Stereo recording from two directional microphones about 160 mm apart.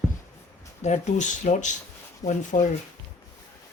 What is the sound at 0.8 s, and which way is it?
Speech, 50° left (ahead or behind).